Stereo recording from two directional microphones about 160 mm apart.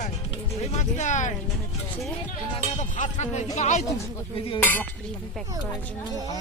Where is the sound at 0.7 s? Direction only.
45° left (ahead or behind).